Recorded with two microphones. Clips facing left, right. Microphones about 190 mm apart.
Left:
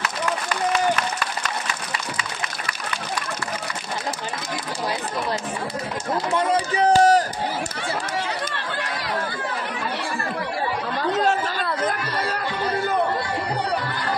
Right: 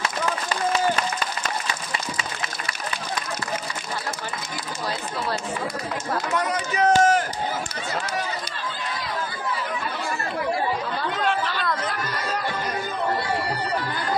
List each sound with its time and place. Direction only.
6.3 s run: 30° left (ahead or behind)
8.5 s chatter: 75° left (ahead or behind)
11.0 s chatter: 40° left (ahead or behind)